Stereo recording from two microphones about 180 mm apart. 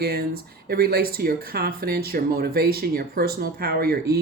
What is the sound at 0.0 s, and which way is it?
Speech, 60° right (ahead or behind).